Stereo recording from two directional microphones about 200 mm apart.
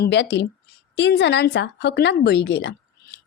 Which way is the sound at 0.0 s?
60° left (ahead or behind).